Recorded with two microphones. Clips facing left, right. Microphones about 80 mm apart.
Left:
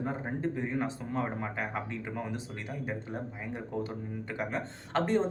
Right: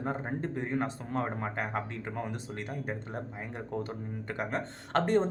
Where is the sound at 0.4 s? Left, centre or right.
Right.